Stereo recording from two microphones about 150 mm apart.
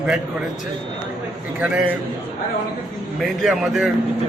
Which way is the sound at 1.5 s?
10° right (ahead or behind).